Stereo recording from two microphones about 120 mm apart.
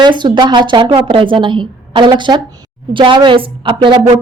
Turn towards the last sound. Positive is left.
turn(degrees=-45)  # may be behind; listen again after turning